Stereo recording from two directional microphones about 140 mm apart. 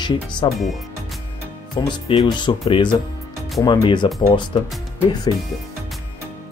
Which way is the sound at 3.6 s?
35° left (ahead or behind).